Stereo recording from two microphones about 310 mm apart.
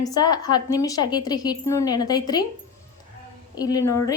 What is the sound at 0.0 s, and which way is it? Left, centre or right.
A woman's voice, centre.